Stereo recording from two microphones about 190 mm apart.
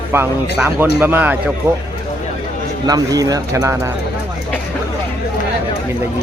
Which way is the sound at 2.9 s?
20° right (ahead or behind).